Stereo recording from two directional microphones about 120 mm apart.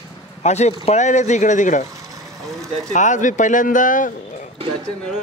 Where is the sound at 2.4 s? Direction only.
Centre (ahead or behind).